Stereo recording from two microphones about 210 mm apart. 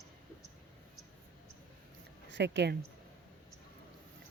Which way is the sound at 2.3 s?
55° right (ahead or behind).